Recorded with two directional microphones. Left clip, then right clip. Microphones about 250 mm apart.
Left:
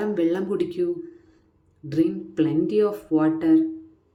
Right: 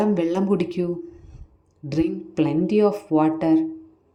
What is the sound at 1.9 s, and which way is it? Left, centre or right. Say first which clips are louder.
Speech: left 1 dB; centre.